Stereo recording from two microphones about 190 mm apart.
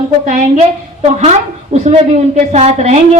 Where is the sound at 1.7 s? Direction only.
35° right (ahead or behind).